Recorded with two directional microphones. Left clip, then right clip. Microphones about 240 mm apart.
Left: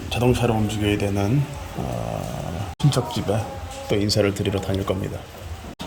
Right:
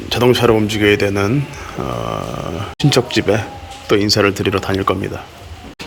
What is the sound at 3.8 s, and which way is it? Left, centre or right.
Speech, centre.